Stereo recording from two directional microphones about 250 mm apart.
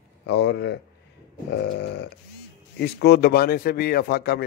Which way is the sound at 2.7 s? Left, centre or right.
Left.